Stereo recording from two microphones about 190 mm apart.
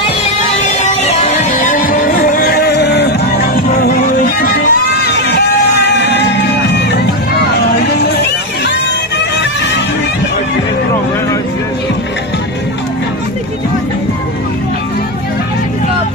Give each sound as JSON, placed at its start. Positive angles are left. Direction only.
{"t": 0.6, "sound": "music", "side_deg": 35}